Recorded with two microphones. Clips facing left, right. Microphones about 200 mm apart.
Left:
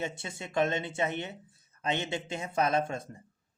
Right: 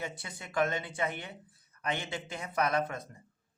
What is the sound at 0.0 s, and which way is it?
Speech, 25° left (ahead or behind).